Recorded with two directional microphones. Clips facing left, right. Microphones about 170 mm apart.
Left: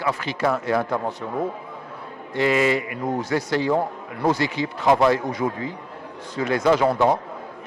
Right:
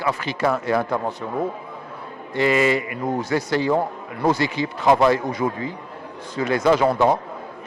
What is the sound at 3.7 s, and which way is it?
Speech, 30° right (ahead or behind).